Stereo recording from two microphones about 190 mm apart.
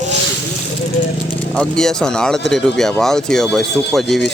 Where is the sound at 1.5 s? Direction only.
5° left (ahead or behind).